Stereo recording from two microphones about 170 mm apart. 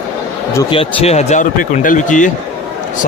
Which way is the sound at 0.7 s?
30° left (ahead or behind).